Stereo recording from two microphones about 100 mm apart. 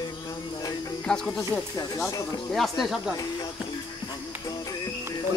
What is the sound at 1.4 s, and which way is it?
Speech, 30° left (ahead or behind).